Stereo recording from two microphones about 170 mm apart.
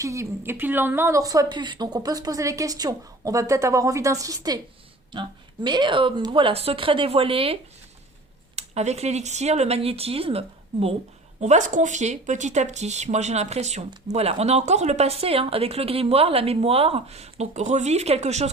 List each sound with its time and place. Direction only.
0.0 s a woman's voice: 15° right (ahead or behind)
5.6 s speech: 25° right (ahead or behind)